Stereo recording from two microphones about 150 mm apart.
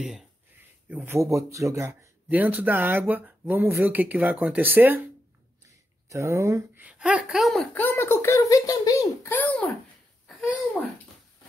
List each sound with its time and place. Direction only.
0.8 s speech: 10° right (ahead or behind)
6.0 s speech: 20° right (ahead or behind); by 7.6 s centre (ahead or behind)
7.7 s speech: 15° left (ahead or behind)
9.3 s speech: 10° left (ahead or behind)
10.2 s a sound: 5° right (ahead or behind)